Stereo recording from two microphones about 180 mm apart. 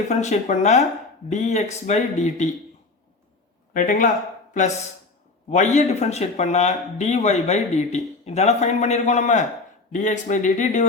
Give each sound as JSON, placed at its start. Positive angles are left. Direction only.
{"t": 0.1, "sound": "speech", "side_deg": 40}
{"t": 3.8, "sound": "speech", "side_deg": 45}
{"t": 5.5, "sound": "speech", "side_deg": 40}